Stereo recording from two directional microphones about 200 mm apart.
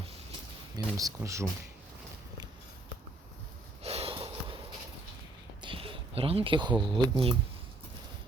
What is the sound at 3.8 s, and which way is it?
Sniff, 30° right (ahead or behind).